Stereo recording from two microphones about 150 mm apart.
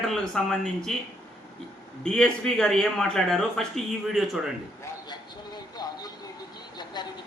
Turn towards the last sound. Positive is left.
turn(degrees=30)  # may be behind; listen again after turning